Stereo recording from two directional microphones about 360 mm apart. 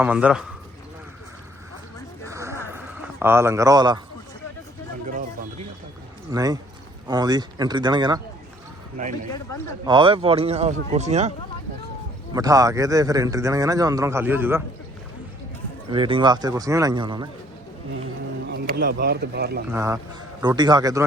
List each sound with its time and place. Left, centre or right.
0.0 s a man's voice: centre
2.3 s a sound: centre
6.3 s speech: centre
9.8 s speech: centre
12.3 s speech: centre
15.9 s speech: centre
18.4 s speech: right
19.7 s speech: centre